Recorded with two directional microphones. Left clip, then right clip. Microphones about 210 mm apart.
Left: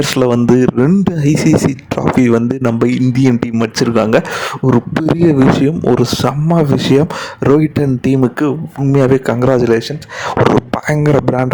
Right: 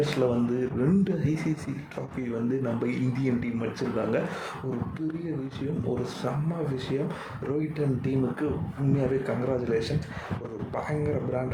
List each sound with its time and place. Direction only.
0.0 s speech: 55° left (ahead or behind)
10.8 s speech: 55° left (ahead or behind)